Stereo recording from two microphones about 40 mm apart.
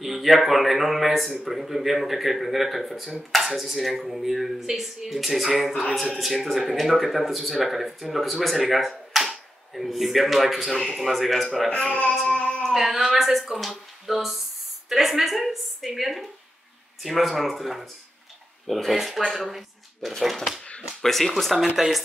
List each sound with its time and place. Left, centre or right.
0.0 s speech: centre
11.9 s music: left
12.3 s a sound: left
12.7 s a woman's voice: centre
21.7 s speech: centre